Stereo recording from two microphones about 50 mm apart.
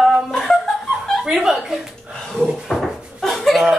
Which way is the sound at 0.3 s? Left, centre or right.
Centre.